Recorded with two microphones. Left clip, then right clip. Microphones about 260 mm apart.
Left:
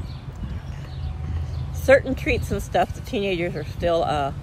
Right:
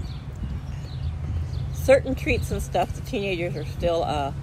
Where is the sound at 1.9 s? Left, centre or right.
Left.